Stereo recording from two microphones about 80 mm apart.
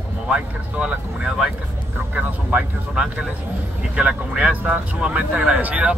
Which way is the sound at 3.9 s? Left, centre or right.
Centre.